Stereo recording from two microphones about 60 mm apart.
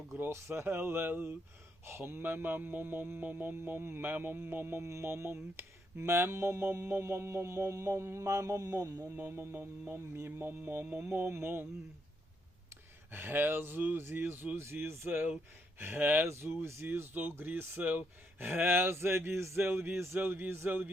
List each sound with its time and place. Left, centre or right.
0.1 s speech: right
9.1 s music: right
13.1 s music: right
15.8 s speech: right
16.2 s music: right
17.7 s speech: right
18.3 s speech: right
19.6 s music: right
20.7 s speech: right